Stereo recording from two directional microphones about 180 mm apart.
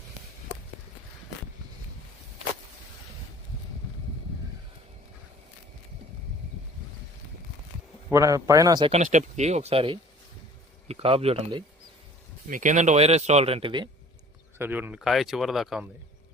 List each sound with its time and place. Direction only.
8.1 s speech: 15° right (ahead or behind)
8.9 s speech: 40° right (ahead or behind)
12.5 s speech: 45° right (ahead or behind); by 13.8 s 30° right (ahead or behind)
14.6 s speech: 10° right (ahead or behind)